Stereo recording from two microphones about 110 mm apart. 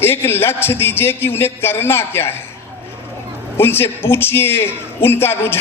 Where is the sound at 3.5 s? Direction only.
20° left (ahead or behind).